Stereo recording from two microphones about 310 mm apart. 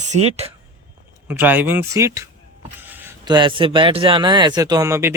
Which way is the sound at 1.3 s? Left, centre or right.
Centre.